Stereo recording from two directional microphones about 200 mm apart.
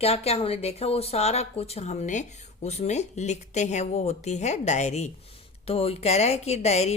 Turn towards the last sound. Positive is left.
turn(degrees=35)  # may be behind; listen again after turning